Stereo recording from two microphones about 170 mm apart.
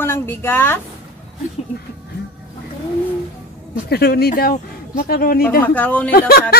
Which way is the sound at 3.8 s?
65° left (ahead or behind).